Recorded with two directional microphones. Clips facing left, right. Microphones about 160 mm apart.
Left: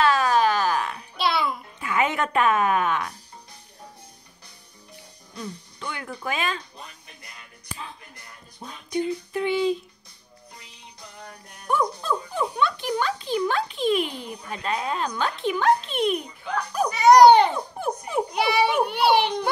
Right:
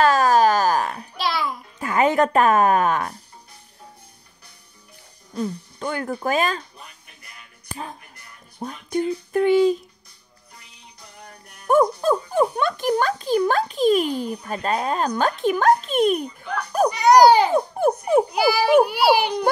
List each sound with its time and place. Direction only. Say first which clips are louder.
0.0 s a sound: right 4 dB; 40° right (ahead or behind)
1.1 s music: left 2 dB; centre (ahead or behind)
1.8 s speech: right 6 dB; 40° right (ahead or behind)
5.3 s speech: right 9 dB; 45° right (ahead or behind)
7.6 s speech: right 5 dB; 45° right (ahead or behind)
11.6 s speech: right 8 dB; 45° right (ahead or behind)
16.9 s speech: left 1 dB; centre (ahead or behind)
17.6 s speech: right 9 dB; 50° right (ahead or behind)
18.3 s a child's voice: right 1 dB; centre (ahead or behind)